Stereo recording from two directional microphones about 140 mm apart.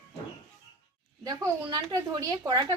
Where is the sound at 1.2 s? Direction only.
30° right (ahead or behind).